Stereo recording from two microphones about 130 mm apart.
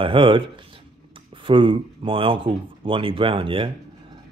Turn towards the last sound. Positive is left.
turn(degrees=-40)  # may be behind; listen again after turning